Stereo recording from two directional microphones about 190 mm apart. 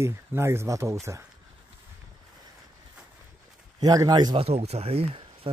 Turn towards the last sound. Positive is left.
turn(degrees=-30)  # may be behind; listen again after turning